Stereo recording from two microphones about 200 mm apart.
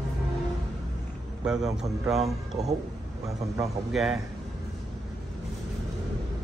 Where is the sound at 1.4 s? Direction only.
5° right (ahead or behind).